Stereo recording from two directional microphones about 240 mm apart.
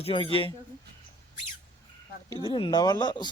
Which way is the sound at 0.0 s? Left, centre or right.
Left.